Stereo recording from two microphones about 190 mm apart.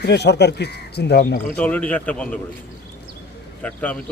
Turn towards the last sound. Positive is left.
turn(degrees=5)  # may be behind; listen again after turning